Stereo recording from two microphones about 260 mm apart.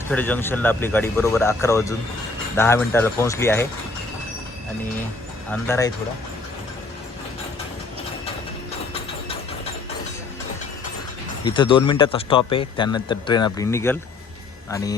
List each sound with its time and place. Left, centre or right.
0.1 s speech: centre
5.5 s speech: centre
11.4 s speech: centre